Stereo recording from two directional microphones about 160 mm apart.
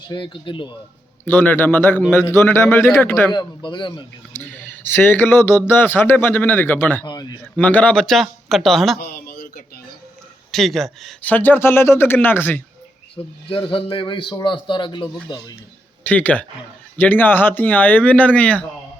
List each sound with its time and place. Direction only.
0.1 s a man's voice: 30° left (ahead or behind)
1.2 s speech: 10° left (ahead or behind)
3.3 s speech: 30° left (ahead or behind)
4.3 s speech: 15° left (ahead or behind)
7.1 s speech: 25° left (ahead or behind)
7.5 s speech: 10° left (ahead or behind)
9.0 s a sound: 75° left (ahead or behind)
10.5 s speech: centre (ahead or behind)
11.3 s speech: 10° left (ahead or behind)
13.5 s a man's voice: 35° left (ahead or behind)
16.0 s speech: 10° left (ahead or behind)